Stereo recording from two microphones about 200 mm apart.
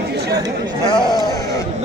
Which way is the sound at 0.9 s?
20° left (ahead or behind).